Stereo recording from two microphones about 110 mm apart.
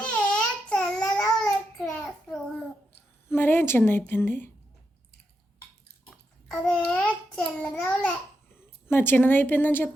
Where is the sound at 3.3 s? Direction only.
20° left (ahead or behind).